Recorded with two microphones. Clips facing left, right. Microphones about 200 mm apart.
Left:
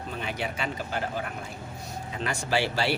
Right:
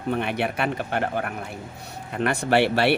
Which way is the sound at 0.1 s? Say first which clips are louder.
Right 9 dB; 65° right (ahead or behind).